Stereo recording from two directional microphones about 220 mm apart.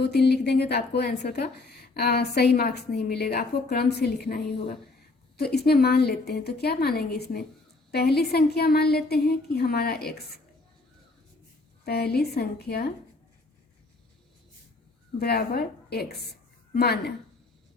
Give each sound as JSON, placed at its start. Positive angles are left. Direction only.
{"t": 0.0, "sound": "a woman's voice", "side_deg": 50}
{"t": 11.9, "sound": "a woman's voice", "side_deg": 45}
{"t": 15.2, "sound": "a woman's voice", "side_deg": 45}